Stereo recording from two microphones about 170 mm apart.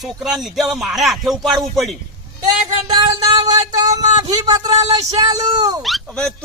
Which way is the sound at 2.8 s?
25° right (ahead or behind).